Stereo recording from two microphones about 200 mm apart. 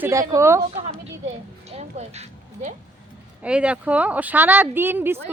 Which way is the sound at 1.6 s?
35° right (ahead or behind).